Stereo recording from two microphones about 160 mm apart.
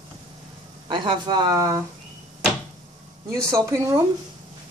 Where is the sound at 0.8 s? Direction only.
30° right (ahead or behind).